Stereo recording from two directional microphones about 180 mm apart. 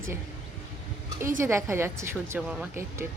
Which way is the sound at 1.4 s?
15° right (ahead or behind).